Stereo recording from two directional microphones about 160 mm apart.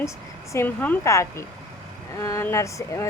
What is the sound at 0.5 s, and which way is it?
Speech, 10° left (ahead or behind).